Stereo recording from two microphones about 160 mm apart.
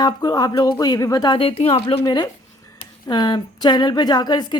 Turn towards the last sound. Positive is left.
turn(degrees=25)  # may be behind; listen again after turning